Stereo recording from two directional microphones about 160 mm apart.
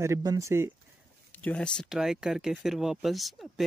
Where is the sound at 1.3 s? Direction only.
10° left (ahead or behind).